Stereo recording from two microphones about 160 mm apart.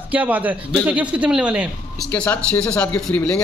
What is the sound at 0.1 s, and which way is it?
Speech, 10° right (ahead or behind).